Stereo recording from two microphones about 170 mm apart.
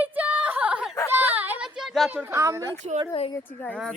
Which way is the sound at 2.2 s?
15° right (ahead or behind).